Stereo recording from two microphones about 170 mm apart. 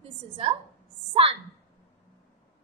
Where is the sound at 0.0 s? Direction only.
35° right (ahead or behind).